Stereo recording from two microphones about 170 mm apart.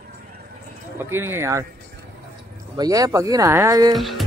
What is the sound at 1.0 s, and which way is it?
Speech, 15° right (ahead or behind).